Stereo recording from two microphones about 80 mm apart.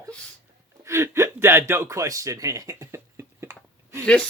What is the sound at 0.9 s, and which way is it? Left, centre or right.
Speech, right.